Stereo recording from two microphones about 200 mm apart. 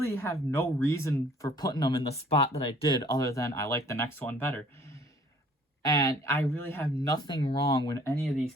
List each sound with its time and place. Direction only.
0.1 s speech: 15° left (ahead or behind)
7.9 s speech: 15° left (ahead or behind)